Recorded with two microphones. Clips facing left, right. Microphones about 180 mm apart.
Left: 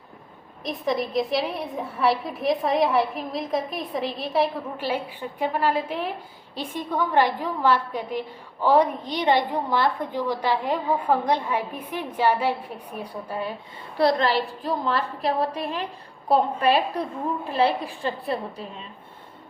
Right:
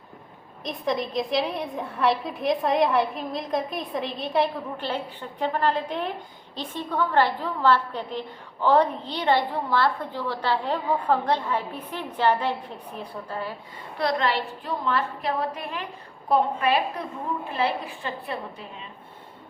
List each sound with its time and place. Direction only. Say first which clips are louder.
0.6 s a woman's voice: left 1 dB; centre (ahead or behind)
14.0 s a woman's voice: left 4 dB; 35° left (ahead or behind)